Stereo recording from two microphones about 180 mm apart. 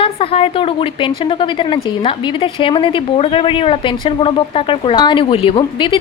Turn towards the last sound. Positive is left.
turn(degrees=30)  # may be behind; listen again after turning